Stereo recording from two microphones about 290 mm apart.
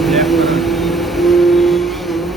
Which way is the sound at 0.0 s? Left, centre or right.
Centre.